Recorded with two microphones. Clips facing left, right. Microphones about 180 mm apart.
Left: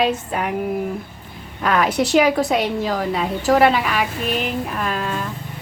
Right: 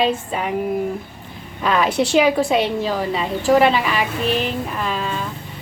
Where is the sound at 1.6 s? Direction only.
Centre (ahead or behind).